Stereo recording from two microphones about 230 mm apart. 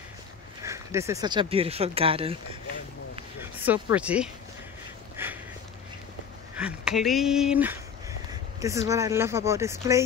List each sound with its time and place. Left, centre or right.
0.7 s speech: centre
3.6 s speech: centre
5.1 s a sound: centre
6.5 s speech: centre